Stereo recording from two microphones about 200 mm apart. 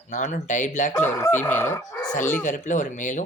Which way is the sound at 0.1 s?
40° left (ahead or behind).